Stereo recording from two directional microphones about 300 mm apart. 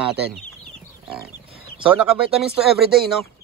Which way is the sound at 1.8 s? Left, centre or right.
Centre.